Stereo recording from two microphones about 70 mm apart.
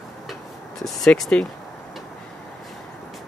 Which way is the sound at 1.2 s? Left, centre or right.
Centre.